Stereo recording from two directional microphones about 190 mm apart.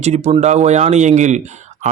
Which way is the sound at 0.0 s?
35° right (ahead or behind).